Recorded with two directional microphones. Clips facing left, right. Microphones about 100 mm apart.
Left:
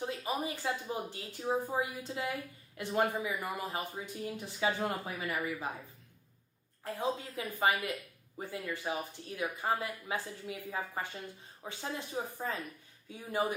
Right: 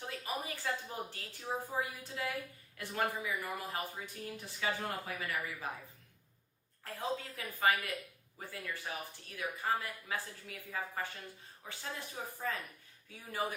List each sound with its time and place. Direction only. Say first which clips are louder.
0.0 s speech: left 5 dB; 20° left (ahead or behind)
6.8 s speech: left 4 dB; 20° left (ahead or behind)